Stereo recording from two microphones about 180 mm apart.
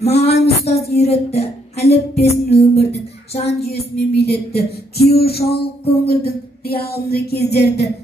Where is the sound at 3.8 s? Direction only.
35° left (ahead or behind).